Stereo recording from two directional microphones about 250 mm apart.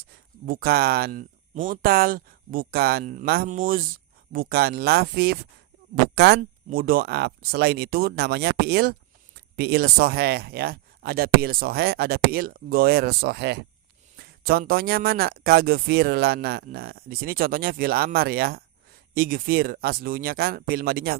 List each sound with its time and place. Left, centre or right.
0.4 s speech: right